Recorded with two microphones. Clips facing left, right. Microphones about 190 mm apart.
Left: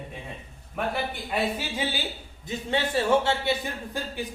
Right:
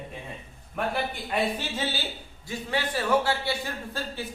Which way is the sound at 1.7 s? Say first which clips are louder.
Left 1 dB; 15° left (ahead or behind).